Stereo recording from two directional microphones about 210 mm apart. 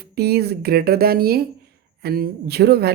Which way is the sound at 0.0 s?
50° right (ahead or behind).